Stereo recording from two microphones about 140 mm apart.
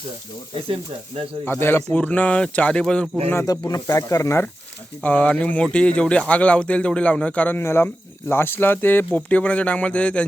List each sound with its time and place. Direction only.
1.5 s speech: 15° left (ahead or behind)
3.7 s speech: 25° left (ahead or behind); by 10.2 s 10° left (ahead or behind)